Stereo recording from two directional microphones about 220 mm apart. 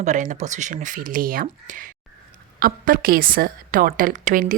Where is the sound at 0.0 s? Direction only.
35° right (ahead or behind).